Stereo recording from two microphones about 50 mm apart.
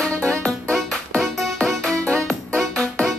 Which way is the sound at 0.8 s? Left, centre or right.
Centre.